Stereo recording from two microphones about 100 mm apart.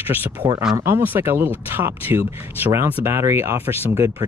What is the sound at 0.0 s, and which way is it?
Speech, 20° right (ahead or behind).